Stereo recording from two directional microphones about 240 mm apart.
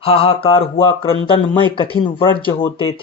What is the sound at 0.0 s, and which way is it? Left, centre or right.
Speech, left.